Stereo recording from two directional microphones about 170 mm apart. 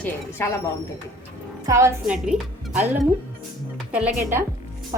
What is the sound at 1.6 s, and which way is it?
Speech, 15° right (ahead or behind).